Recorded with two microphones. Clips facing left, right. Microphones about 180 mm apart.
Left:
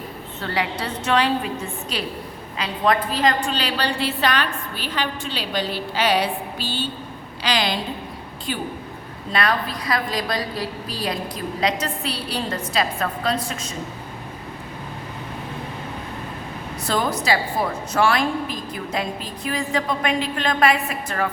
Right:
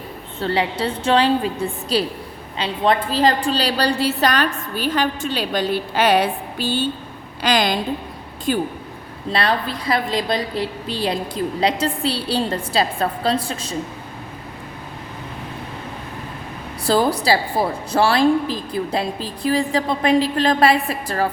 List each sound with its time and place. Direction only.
0.3 s a woman's voice: 30° right (ahead or behind); by 8.6 s 45° right (ahead or behind)
9.3 s a woman's voice: 30° right (ahead or behind)
16.8 s a woman's voice: 30° right (ahead or behind)